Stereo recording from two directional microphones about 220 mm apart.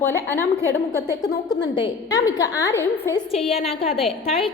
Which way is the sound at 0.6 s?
15° right (ahead or behind).